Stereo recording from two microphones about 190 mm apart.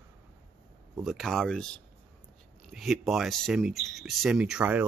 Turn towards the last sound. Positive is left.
turn(degrees=-10)  # may be behind; listen again after turning